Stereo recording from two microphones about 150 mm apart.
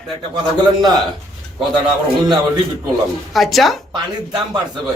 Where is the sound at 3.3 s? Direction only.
Centre (ahead or behind).